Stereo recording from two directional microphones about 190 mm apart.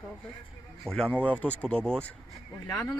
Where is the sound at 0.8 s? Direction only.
Centre (ahead or behind).